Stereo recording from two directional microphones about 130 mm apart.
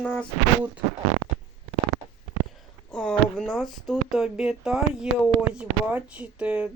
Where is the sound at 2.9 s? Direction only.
5° left (ahead or behind); by 6.6 s 10° right (ahead or behind).